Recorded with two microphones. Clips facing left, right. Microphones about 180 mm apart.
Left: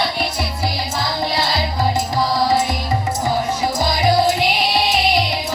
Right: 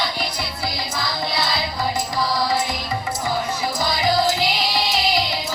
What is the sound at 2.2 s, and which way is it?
Music, 20° left (ahead or behind).